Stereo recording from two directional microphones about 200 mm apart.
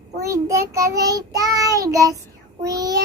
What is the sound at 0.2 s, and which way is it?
Child singing, 15° right (ahead or behind).